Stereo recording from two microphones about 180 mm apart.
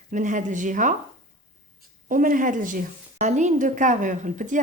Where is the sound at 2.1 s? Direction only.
50° right (ahead or behind).